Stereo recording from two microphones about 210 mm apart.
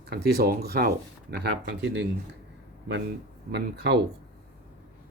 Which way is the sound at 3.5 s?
50° right (ahead or behind).